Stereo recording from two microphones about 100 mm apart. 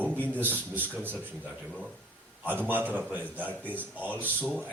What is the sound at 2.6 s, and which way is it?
A man's voice, 20° right (ahead or behind).